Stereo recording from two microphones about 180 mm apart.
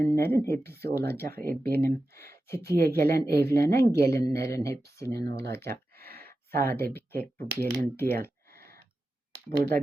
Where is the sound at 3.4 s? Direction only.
15° left (ahead or behind).